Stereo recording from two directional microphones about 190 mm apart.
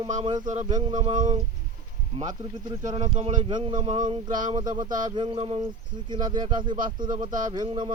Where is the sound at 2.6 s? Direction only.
25° right (ahead or behind).